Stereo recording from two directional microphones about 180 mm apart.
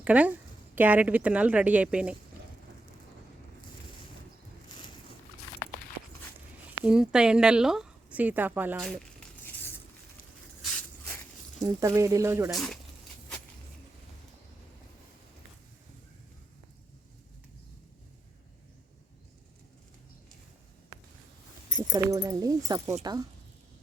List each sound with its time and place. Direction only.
0.0 s a woman's voice: 10° right (ahead or behind)
6.8 s a woman's voice: 5° right (ahead or behind)
11.6 s a woman's voice: 20° right (ahead or behind)
12.5 s a woman's voice: centre (ahead or behind)
21.8 s speech: 20° right (ahead or behind)